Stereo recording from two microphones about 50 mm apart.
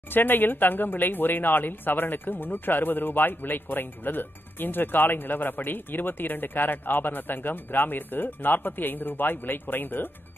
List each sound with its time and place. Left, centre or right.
0.1 s speech: left